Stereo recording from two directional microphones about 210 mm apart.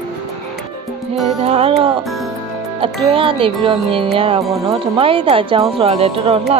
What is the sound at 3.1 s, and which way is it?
Speech, 25° right (ahead or behind).